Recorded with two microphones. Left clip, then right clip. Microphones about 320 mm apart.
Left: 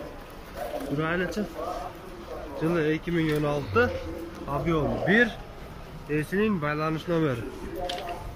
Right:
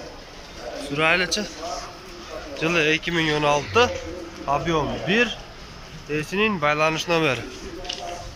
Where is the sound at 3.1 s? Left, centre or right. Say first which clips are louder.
Right 5 dB; right.